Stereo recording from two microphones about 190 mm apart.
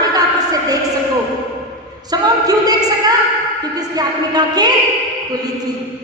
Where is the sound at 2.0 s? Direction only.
20° right (ahead or behind).